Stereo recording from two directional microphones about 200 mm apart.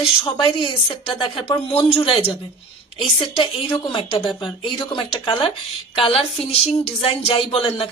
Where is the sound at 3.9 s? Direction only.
25° left (ahead or behind).